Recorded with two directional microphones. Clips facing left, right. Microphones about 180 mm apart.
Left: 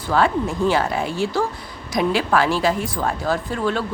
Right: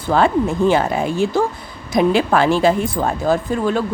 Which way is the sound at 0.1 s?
25° right (ahead or behind).